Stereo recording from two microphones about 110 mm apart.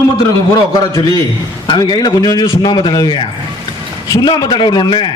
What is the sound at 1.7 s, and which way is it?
A man's voice, 40° left (ahead or behind).